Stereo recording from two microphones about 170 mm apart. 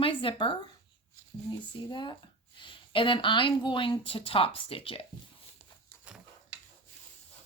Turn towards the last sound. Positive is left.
turn(degrees=-5)  # may be behind; listen again after turning